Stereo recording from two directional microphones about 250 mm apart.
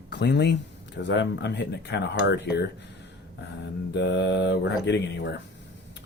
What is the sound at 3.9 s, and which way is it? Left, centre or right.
Speech, left.